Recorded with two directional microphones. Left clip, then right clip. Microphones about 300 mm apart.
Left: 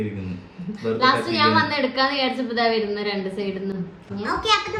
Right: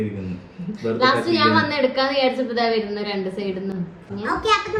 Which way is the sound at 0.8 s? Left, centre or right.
Centre.